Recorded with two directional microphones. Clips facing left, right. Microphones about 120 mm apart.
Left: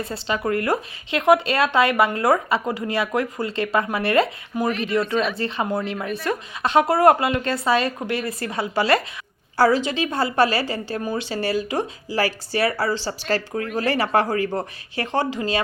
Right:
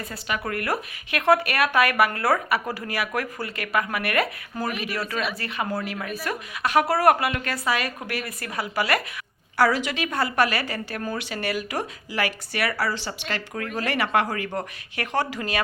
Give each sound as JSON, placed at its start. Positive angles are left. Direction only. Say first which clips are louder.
{"t": 0.0, "sound": "a woman's voice", "louder": "left 5 dB", "side_deg": 25}